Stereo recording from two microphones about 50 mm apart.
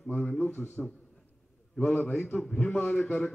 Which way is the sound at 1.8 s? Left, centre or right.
Left.